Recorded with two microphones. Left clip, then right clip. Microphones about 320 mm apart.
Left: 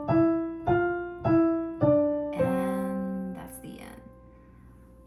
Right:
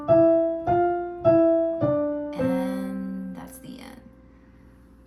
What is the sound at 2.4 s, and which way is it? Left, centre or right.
Music, centre.